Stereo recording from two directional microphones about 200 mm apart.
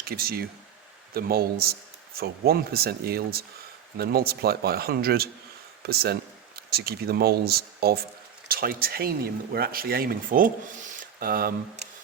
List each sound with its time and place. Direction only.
0.0 s speech: 50° right (ahead or behind)